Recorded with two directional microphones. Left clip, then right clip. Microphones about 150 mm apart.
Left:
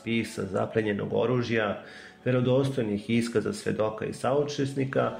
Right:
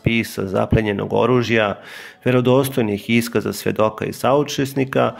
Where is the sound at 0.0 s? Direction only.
35° right (ahead or behind).